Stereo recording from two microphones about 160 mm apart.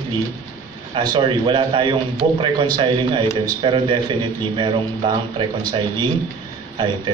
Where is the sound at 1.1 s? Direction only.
30° right (ahead or behind).